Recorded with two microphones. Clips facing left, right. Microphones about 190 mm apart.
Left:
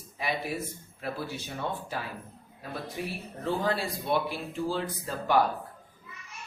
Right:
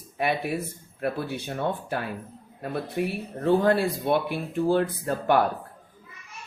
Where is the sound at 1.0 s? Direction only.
60° right (ahead or behind).